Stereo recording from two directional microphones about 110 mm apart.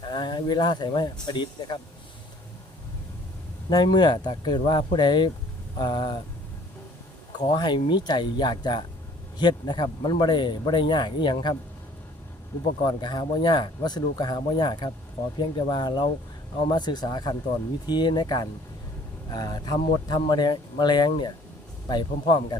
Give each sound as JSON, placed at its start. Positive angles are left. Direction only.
{"t": 0.0, "sound": "speech", "side_deg": 45}
{"t": 3.7, "sound": "speech", "side_deg": 45}
{"t": 7.3, "sound": "speech", "side_deg": 40}
{"t": 12.8, "sound": "speech", "side_deg": 40}